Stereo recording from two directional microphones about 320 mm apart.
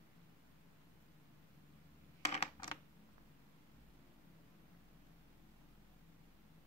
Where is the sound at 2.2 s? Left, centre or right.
Centre.